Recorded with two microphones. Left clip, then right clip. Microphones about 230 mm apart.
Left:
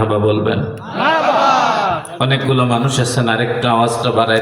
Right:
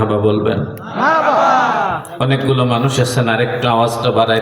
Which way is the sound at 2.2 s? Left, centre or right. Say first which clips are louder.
Right 1 dB; right.